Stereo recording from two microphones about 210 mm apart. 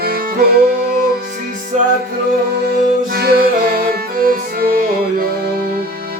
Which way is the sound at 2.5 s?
50° right (ahead or behind).